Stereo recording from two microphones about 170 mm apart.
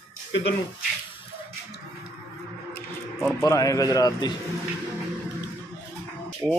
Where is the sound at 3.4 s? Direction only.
20° left (ahead or behind).